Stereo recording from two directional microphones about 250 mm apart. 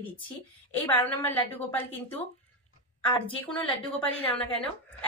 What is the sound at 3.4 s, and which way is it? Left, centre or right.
Speech, centre.